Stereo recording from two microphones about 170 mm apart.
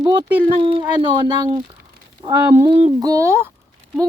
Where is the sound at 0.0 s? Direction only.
25° right (ahead or behind).